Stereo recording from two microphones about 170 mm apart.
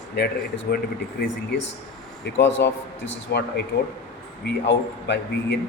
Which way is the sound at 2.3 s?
90° left.